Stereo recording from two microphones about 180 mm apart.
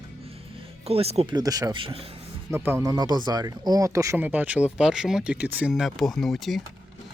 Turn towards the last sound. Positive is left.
turn(degrees=0)  # may be behind; listen again after turning